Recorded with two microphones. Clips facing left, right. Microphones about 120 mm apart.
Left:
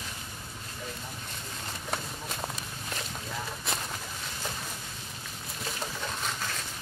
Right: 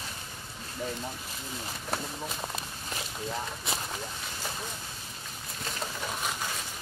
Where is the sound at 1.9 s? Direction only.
Centre (ahead or behind).